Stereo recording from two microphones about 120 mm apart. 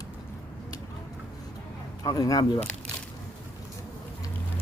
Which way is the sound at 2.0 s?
30° left (ahead or behind).